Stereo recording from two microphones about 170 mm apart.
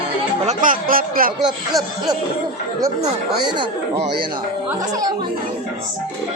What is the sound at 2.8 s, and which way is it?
Speech, 25° right (ahead or behind).